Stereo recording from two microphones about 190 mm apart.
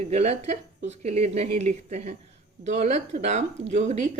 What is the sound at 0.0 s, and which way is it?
A woman's voice, 35° right (ahead or behind).